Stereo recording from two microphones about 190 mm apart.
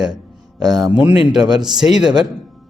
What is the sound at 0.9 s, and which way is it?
Speech, 10° right (ahead or behind).